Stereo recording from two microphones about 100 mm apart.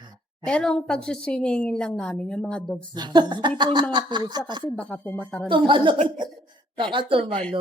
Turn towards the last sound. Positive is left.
turn(degrees=-65)  # may be behind; listen again after turning